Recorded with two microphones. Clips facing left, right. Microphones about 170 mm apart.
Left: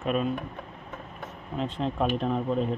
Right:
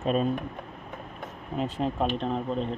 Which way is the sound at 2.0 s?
5° left (ahead or behind).